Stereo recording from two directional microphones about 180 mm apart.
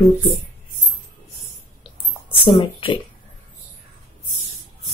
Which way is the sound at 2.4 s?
30° left (ahead or behind).